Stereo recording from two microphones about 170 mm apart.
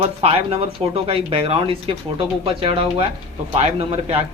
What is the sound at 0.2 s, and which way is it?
Speech, 35° right (ahead or behind).